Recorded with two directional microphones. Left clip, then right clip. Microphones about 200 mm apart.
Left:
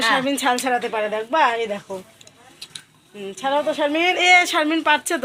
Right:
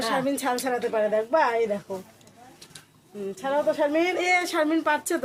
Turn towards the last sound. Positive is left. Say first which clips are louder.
# left 5 dB
turn(degrees=15)  # may be behind; listen again after turning